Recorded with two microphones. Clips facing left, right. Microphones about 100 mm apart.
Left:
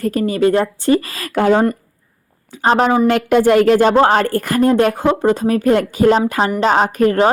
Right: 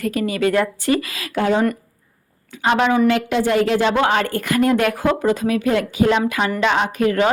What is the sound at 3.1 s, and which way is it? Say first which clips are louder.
A woman's voice: left 5 dB; 50° left (ahead or behind).